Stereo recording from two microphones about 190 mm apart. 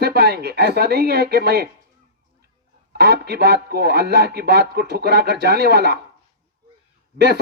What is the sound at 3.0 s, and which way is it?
Speech, 60° right (ahead or behind).